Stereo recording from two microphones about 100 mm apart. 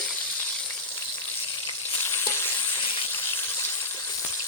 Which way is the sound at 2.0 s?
25° left (ahead or behind).